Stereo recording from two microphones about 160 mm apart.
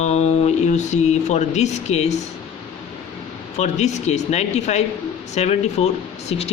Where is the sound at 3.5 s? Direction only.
45° left (ahead or behind).